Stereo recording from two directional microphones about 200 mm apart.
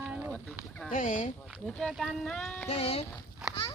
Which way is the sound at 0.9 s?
40° left (ahead or behind).